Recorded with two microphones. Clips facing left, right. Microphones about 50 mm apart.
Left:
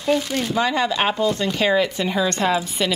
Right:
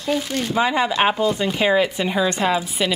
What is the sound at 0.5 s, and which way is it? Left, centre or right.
Speech, centre.